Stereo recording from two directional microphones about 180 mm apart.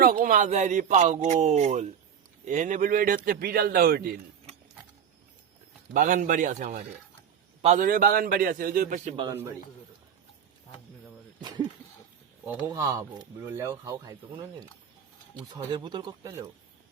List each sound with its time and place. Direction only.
0.0 s a man's voice: 50° right (ahead or behind)
5.9 s a man's voice: 45° right (ahead or behind)
7.9 s a man's voice: 55° right (ahead or behind)
9.3 s speech: 15° right (ahead or behind)
11.3 s a sound: 25° right (ahead or behind)
12.6 s speech: 15° right (ahead or behind)
15.5 s speech: 25° right (ahead or behind)